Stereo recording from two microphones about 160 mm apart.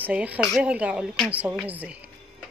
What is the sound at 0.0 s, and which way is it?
Speech, 10° right (ahead or behind).